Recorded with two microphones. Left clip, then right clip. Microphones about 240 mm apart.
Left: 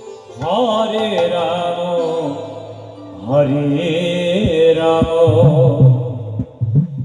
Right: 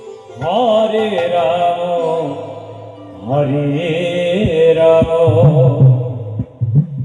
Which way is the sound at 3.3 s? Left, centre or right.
Left.